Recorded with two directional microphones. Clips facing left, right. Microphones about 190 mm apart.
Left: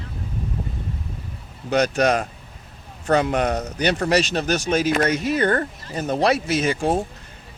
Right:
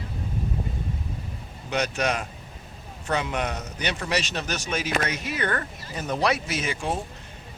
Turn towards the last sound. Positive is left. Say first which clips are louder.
# left 8 dB
turn(degrees=40)  # may be behind; listen again after turning